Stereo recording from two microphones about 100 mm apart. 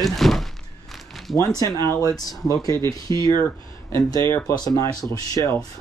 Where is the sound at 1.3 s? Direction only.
35° left (ahead or behind).